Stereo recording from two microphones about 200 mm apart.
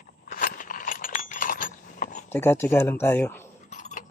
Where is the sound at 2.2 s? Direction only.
10° left (ahead or behind).